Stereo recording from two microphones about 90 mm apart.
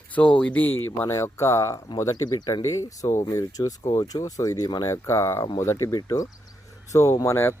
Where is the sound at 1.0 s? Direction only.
30° left (ahead or behind).